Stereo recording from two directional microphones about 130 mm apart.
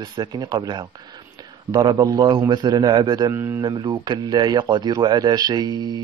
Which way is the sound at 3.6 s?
35° right (ahead or behind).